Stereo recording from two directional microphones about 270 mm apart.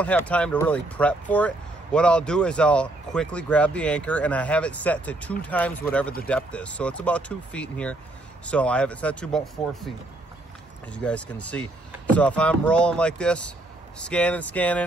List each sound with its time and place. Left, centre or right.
0.0 s speech: centre
10.9 s speech: centre